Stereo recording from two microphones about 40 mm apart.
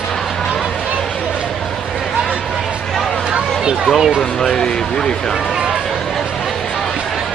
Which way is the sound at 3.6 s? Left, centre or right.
Centre.